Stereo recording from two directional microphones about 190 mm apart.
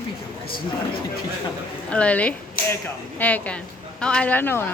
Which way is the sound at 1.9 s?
5° left (ahead or behind).